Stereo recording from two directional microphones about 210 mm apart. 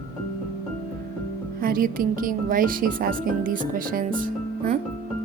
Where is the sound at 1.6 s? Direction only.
45° right (ahead or behind).